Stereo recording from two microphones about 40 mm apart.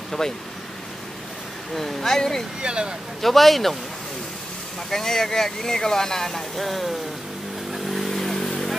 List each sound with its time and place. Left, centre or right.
0.2 s speech: centre
1.8 s speech: centre
2.6 s speech: right
3.2 s speech: centre
4.9 s speech: centre
7.7 s vehicle: centre